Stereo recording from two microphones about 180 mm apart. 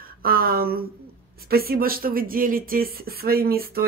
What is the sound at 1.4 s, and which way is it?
A child's voice, 60° right (ahead or behind).